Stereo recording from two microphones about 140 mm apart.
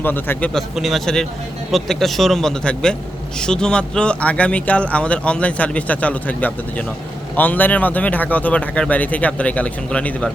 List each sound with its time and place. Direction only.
0.0 s speech: 15° left (ahead or behind)
0.5 s a man's voice: centre (ahead or behind)